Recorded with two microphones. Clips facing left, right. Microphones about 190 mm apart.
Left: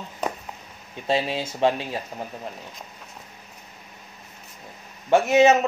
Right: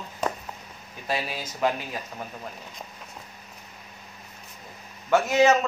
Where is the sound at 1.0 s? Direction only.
25° left (ahead or behind).